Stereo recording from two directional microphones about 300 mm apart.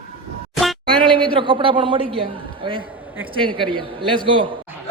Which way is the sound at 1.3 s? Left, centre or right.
Centre.